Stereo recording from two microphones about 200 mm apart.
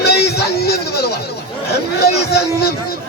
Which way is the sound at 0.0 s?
55° left (ahead or behind).